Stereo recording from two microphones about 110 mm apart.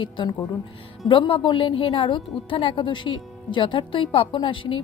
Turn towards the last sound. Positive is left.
turn(degrees=50)  # may be behind; listen again after turning